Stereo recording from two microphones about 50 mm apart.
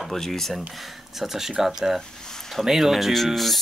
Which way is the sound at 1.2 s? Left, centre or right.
Centre.